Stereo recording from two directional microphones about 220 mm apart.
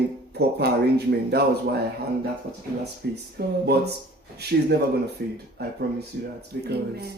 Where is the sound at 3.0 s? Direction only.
45° right (ahead or behind).